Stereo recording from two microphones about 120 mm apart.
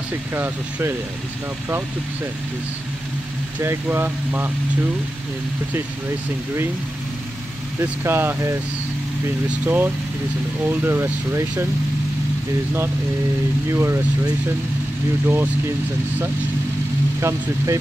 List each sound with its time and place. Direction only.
0.3 s speech: 20° right (ahead or behind)
3.6 s speech: 20° right (ahead or behind)
7.8 s speech: 20° right (ahead or behind)
9.7 s speech: 15° right (ahead or behind)
13.7 s speech: 20° right (ahead or behind)
15.2 s speech: 15° right (ahead or behind)
17.2 s speech: 25° right (ahead or behind)